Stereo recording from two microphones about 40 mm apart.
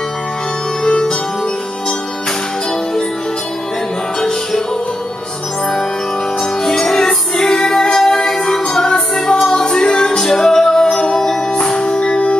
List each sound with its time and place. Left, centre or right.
0.8 s music: left
6.6 s music: centre
11.5 s music: left